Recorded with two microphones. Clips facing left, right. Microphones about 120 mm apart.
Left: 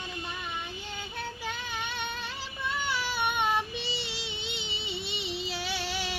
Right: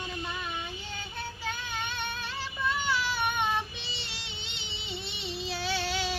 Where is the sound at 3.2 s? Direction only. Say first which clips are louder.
Left 1 dB; 5° left (ahead or behind).